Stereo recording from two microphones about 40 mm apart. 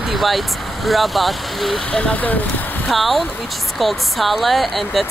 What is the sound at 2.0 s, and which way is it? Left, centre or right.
Speech, left.